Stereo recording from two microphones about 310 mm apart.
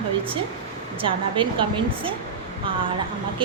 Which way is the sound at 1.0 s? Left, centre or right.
Centre.